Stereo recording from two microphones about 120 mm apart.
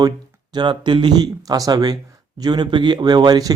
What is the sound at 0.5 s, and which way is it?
Speech, 40° right (ahead or behind).